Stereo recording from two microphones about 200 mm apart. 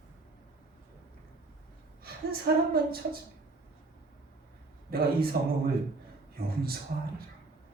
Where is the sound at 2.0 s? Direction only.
50° right (ahead or behind).